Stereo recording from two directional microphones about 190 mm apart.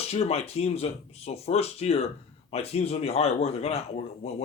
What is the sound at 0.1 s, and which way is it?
A man's voice, 35° left (ahead or behind).